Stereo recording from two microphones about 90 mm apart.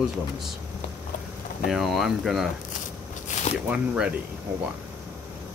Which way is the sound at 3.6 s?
15° right (ahead or behind).